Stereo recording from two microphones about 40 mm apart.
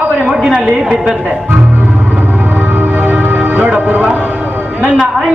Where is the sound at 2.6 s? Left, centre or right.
Right.